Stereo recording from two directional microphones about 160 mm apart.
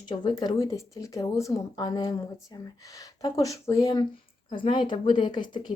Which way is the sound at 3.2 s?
25° left (ahead or behind).